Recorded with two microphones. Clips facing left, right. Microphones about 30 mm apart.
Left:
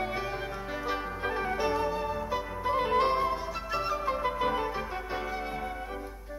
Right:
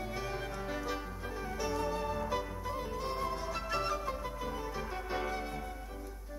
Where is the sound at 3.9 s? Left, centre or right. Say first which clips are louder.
Left 9 dB; left.